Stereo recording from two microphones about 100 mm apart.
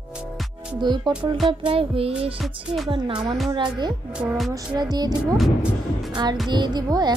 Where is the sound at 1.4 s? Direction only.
65° right (ahead or behind).